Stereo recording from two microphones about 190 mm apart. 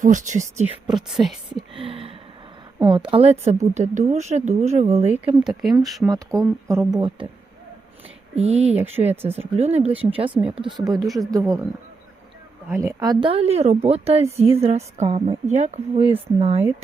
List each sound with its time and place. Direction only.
0.0 s speech: 40° right (ahead or behind)
0.9 s speech: centre (ahead or behind)
1.7 s a sound: 30° right (ahead or behind)
2.7 s speech: 25° right (ahead or behind)
5.4 s speech: centre (ahead or behind)
6.1 s speech: 20° right (ahead or behind)
8.4 s speech: 35° right (ahead or behind); by 11.6 s 20° right (ahead or behind)
12.7 s speech: 15° right (ahead or behind); by 16.6 s 35° right (ahead or behind)